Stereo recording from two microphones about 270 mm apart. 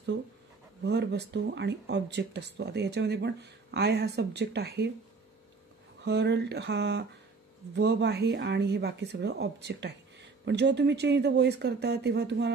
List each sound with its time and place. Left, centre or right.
0.8 s speech: right
6.0 s speech: right